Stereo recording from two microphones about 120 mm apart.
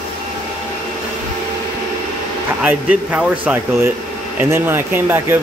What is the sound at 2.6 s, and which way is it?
Speech, 10° right (ahead or behind).